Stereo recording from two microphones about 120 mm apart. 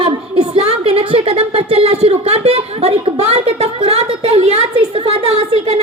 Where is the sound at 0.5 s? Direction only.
55° right (ahead or behind).